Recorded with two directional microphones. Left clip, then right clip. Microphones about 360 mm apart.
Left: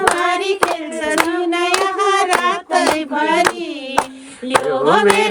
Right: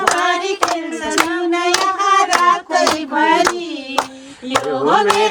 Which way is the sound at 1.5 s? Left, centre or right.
Left.